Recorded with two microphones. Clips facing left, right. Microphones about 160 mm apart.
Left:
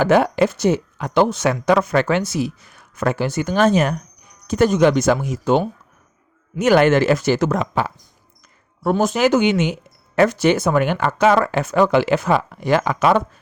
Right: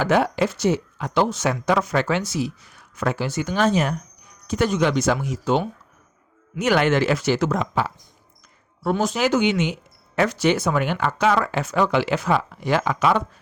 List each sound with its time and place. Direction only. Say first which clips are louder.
0.0 s speech: left 4 dB; 55° left (ahead or behind)